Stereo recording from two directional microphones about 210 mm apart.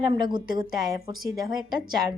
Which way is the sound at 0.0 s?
20° right (ahead or behind).